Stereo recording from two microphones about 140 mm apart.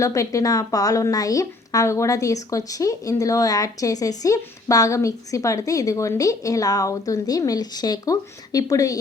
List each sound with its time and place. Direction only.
0.0 s a woman's voice: 20° left (ahead or behind)